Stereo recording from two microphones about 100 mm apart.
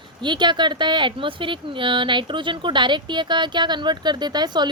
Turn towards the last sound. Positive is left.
turn(degrees=-45)  # may be behind; listen again after turning